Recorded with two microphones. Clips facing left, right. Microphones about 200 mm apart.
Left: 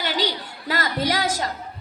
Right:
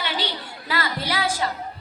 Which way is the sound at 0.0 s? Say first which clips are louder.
Left 3 dB; 40° left (ahead or behind).